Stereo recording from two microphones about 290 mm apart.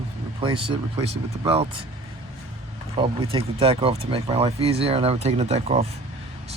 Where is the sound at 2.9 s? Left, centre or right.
Centre.